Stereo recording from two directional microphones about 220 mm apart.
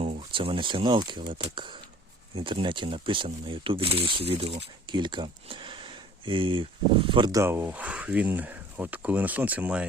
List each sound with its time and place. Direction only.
0.0 s speech: 25° right (ahead or behind); by 9.8 s 5° right (ahead or behind)